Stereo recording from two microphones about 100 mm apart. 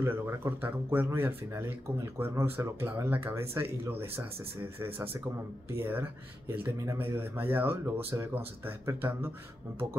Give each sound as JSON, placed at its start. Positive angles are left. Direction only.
{"t": 0.0, "sound": "speech", "side_deg": -25}